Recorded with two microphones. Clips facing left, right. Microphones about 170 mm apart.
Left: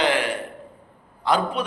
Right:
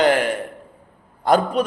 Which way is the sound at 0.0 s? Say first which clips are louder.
Right 5 dB; 45° right (ahead or behind).